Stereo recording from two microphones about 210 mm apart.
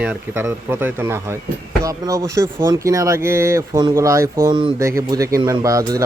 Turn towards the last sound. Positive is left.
turn(degrees=-15)  # may be behind; listen again after turning